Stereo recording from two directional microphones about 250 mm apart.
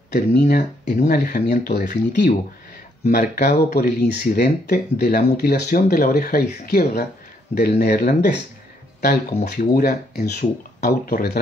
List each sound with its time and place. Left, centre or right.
0.1 s speech: left